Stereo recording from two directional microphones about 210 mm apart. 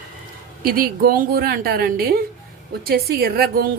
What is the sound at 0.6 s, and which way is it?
Speech, 45° right (ahead or behind).